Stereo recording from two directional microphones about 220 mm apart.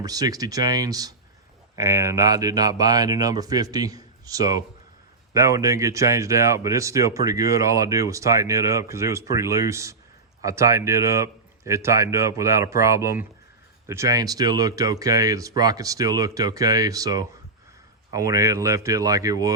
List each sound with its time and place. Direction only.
0.0 s speech: 15° right (ahead or behind)